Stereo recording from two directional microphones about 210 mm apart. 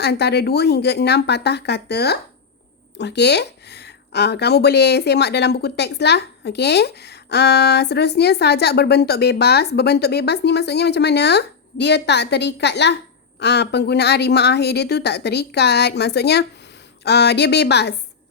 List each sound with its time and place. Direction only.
0.0 s speech: 50° left (ahead or behind)